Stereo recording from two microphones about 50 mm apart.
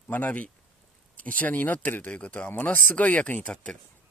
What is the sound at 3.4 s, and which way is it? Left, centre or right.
Speech, left.